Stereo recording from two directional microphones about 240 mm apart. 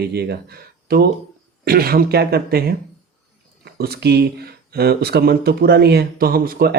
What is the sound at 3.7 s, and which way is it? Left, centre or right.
Speech, right.